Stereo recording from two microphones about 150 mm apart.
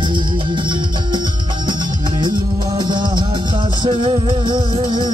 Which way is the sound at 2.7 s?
30° right (ahead or behind).